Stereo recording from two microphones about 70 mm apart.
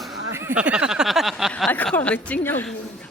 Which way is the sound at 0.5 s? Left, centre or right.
Centre.